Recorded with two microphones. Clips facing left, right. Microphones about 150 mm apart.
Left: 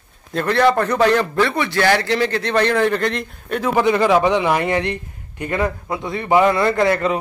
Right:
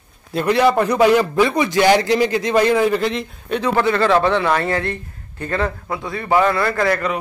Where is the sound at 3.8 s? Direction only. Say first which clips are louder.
Left 2 dB; 15° left (ahead or behind).